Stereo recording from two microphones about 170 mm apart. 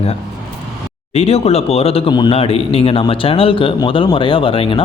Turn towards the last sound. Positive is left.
turn(degrees=30)  # may be behind; listen again after turning